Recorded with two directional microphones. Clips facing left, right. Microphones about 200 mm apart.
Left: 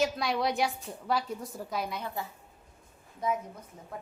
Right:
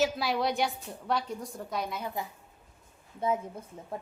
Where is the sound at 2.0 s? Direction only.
15° right (ahead or behind).